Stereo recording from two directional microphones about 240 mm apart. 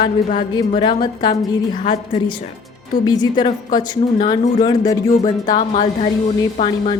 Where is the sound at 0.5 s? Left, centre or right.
Centre.